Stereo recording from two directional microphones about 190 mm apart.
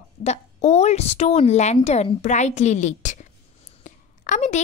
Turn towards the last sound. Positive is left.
turn(degrees=40)  # may be behind; listen again after turning